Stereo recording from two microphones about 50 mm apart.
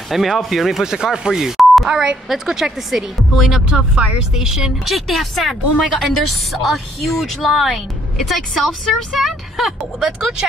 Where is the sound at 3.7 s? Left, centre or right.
Right.